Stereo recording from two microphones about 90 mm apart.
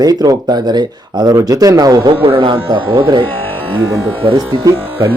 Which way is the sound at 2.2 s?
65° right (ahead or behind).